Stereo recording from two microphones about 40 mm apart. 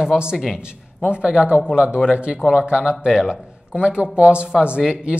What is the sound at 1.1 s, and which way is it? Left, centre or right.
Speech, right.